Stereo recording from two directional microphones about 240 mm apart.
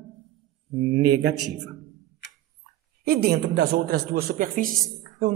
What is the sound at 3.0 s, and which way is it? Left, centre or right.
A man's voice, right.